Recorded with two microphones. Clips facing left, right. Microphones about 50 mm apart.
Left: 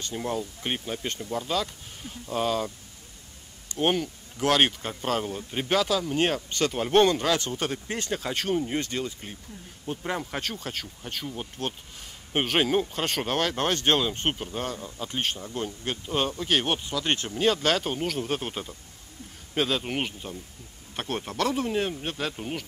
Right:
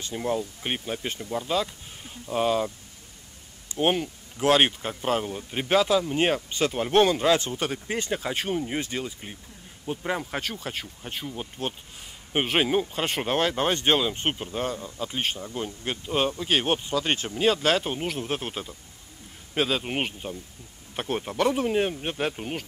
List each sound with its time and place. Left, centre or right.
0.1 s speech: centre
3.7 s speech: centre
4.8 s speech: centre
5.7 s speech: right
6.7 s speech: centre
7.2 s speech: right; by 13.0 s centre
13.0 s speech: centre
14.4 s speech: centre
19.9 s speech: right
21.0 s speech: centre
21.5 s speech: right